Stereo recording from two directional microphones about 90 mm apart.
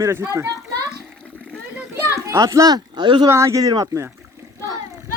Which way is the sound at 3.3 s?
30° right (ahead or behind).